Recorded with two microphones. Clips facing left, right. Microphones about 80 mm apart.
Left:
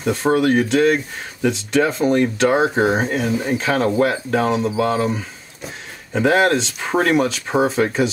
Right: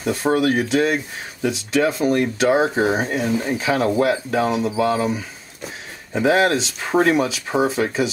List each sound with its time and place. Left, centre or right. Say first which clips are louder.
0.0 s speech: left 2 dB; centre
3.3 s speech: left 1 dB; centre
3.5 s speech: left 2 dB; centre
6.2 s speech: left 1 dB; centre